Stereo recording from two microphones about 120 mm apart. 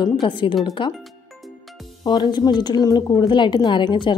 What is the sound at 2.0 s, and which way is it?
Speech, 35° left (ahead or behind).